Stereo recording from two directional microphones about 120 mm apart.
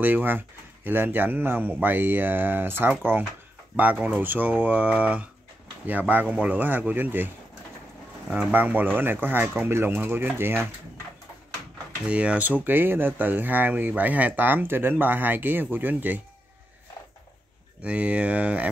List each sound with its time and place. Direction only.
0.0 s speech: 15° right (ahead or behind)
8.3 s speech: 10° right (ahead or behind)
12.1 s speech: 10° right (ahead or behind)
17.8 s speech: 10° right (ahead or behind)